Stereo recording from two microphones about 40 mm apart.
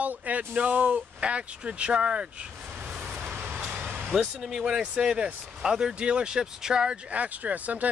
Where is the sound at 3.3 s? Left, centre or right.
Right.